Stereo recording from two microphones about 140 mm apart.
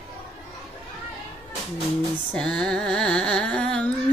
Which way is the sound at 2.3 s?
5° left (ahead or behind).